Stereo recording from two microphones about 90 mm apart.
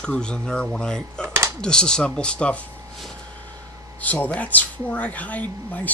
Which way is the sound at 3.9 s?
15° left (ahead or behind).